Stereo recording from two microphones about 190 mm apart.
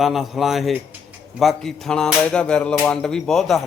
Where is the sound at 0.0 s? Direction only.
Centre (ahead or behind).